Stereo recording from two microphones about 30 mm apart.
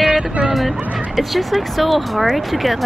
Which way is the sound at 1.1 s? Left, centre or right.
Centre.